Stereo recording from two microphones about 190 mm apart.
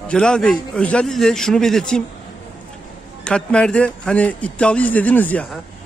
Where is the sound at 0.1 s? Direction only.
5° left (ahead or behind).